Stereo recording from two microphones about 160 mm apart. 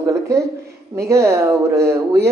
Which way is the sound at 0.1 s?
20° right (ahead or behind).